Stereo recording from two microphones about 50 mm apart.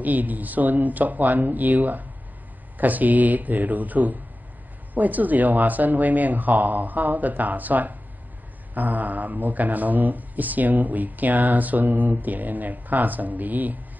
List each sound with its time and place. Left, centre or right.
0.0 s speech: right